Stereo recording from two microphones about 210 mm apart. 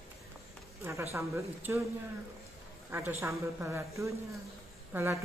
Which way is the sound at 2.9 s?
10° right (ahead or behind).